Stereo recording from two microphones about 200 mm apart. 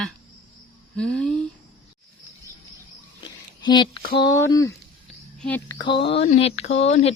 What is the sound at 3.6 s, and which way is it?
Speech, 20° left (ahead or behind).